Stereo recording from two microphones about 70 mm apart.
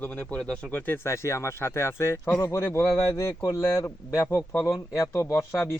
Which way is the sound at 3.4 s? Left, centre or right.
Left.